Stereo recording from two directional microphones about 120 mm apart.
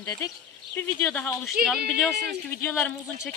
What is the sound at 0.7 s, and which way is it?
Speech, 15° left (ahead or behind).